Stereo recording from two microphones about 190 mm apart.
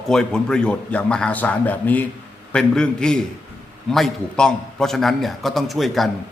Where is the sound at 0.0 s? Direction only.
Centre (ahead or behind).